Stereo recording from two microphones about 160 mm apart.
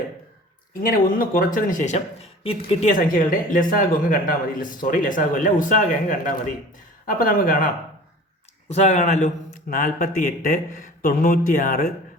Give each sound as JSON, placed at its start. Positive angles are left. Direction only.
{"t": 0.7, "sound": "speech", "side_deg": 65}
{"t": 2.9, "sound": "speech", "side_deg": 55}
{"t": 8.7, "sound": "speech", "side_deg": 45}
{"t": 9.6, "sound": "speech", "side_deg": 55}